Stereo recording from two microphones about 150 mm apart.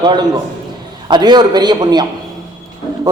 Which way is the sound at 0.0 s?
30° right (ahead or behind).